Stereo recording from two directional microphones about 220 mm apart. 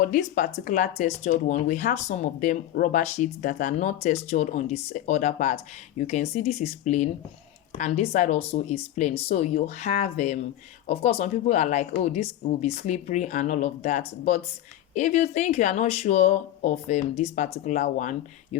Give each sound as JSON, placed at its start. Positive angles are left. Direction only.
{"t": 0.0, "sound": "speech", "side_deg": 35}